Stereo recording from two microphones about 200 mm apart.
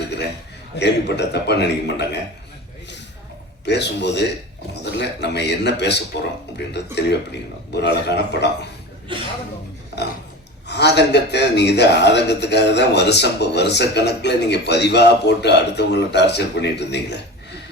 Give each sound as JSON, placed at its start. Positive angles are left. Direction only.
{"t": 0.8, "sound": "speech", "side_deg": 60}
{"t": 3.7, "sound": "speech", "side_deg": 55}
{"t": 9.1, "sound": "speech", "side_deg": -25}
{"t": 10.7, "sound": "speech", "side_deg": 55}